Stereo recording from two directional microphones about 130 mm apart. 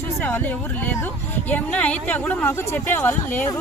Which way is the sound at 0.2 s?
15° left (ahead or behind).